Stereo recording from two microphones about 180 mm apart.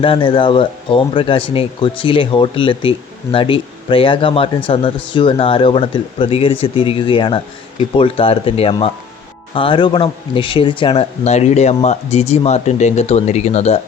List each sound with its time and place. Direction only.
0.0 s speech: 30° left (ahead or behind)